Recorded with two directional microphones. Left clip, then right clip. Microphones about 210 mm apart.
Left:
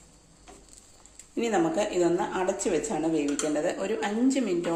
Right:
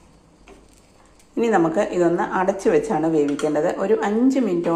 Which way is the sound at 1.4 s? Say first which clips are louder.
Right 7 dB; 10° right (ahead or behind).